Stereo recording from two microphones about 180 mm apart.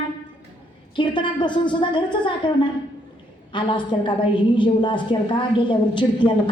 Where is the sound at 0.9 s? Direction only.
25° left (ahead or behind).